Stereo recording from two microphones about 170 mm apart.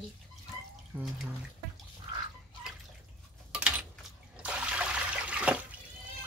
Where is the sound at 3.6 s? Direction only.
10° right (ahead or behind).